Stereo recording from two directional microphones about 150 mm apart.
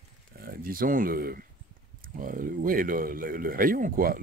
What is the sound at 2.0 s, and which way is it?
Speech, 65° right (ahead or behind).